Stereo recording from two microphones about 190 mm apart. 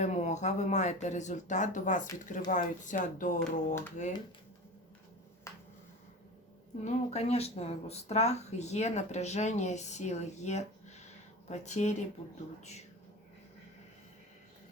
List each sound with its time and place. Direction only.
0.0 s speech: 35° left (ahead or behind)
5.5 s a sound: 15° left (ahead or behind)
6.8 s speech: 35° left (ahead or behind)